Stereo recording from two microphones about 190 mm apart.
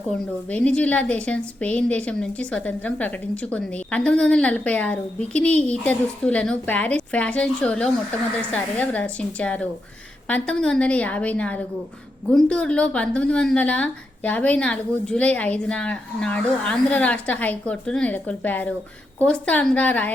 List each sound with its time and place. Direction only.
0.1 s a woman's voice: 5° left (ahead or behind)